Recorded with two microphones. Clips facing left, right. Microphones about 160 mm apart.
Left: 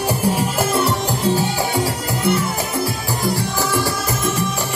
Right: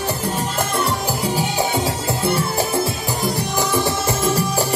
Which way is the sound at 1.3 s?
20° right (ahead or behind).